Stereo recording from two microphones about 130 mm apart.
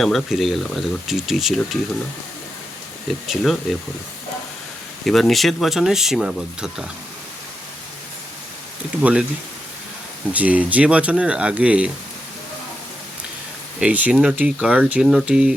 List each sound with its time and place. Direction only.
0.0 s speech: centre (ahead or behind)
3.1 s speech: centre (ahead or behind)
5.0 s speech: centre (ahead or behind)
9.0 s speech: 10° right (ahead or behind)
10.3 s speech: 10° right (ahead or behind)
13.7 s speech: 10° right (ahead or behind)